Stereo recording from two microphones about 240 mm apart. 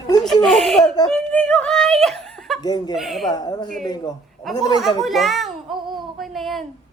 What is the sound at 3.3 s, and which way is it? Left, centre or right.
Speech, centre.